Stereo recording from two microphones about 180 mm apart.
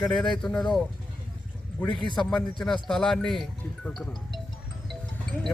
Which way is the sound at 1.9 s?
25° left (ahead or behind).